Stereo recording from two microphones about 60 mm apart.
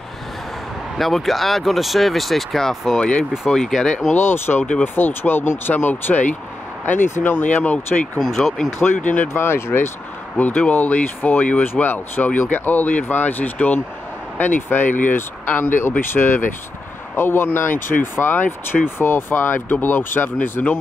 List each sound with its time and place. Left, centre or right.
0.9 s speech: centre
4.1 s speech: left
8.2 s speech: centre
8.8 s speech: left
9.3 s speech: left
10.3 s speech: left